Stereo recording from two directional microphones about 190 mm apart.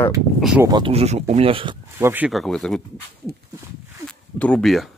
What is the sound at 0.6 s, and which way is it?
Speech, 20° right (ahead or behind).